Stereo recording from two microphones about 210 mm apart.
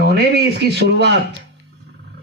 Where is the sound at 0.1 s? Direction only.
50° right (ahead or behind).